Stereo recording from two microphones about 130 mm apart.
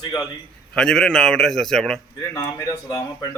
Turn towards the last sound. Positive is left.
turn(degrees=25)  # may be behind; listen again after turning